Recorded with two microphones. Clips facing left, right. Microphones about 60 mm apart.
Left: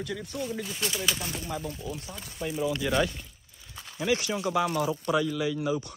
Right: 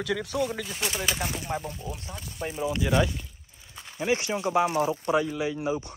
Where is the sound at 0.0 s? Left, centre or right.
Right.